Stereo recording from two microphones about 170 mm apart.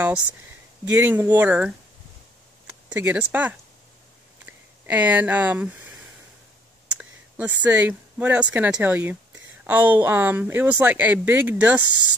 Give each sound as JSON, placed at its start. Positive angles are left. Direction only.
{"t": 0.8, "sound": "speech", "side_deg": -10}
{"t": 7.0, "sound": "speech", "side_deg": -10}